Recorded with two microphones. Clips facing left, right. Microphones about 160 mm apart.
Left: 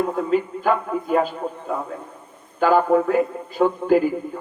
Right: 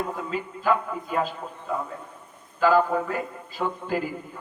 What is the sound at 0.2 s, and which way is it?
A woman's voice, 60° left (ahead or behind).